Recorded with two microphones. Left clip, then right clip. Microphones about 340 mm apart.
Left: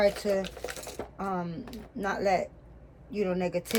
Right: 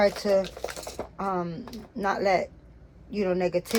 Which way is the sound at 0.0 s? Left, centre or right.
Centre.